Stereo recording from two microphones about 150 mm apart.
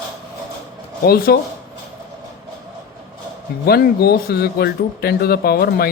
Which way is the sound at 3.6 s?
90° left.